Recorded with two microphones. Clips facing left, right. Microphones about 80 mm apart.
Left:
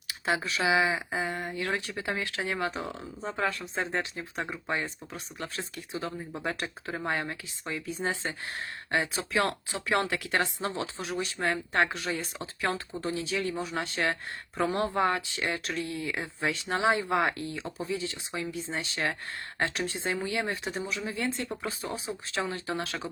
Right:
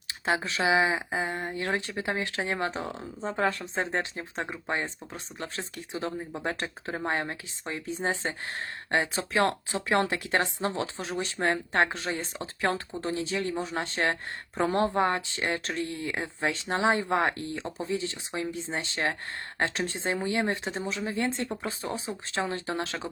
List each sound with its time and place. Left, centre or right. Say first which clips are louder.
0.1 s speech: right 1 dB; right